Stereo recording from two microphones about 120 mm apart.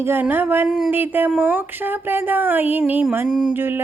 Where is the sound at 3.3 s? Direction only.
5° right (ahead or behind).